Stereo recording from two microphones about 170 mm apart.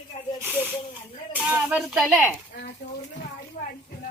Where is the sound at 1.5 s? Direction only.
5° right (ahead or behind).